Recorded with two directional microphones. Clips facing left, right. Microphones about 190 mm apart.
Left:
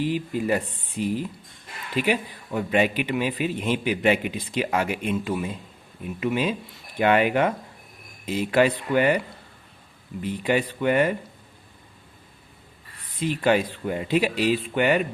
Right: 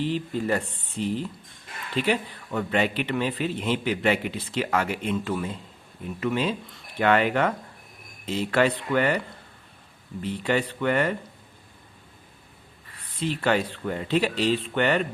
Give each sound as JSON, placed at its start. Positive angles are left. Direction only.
{"t": 0.0, "sound": "a man's voice", "side_deg": 10}
{"t": 13.1, "sound": "a man's voice", "side_deg": 10}